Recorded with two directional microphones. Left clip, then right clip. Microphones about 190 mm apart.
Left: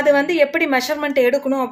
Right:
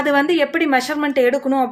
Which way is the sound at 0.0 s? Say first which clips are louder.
Left 2 dB; 15° right (ahead or behind).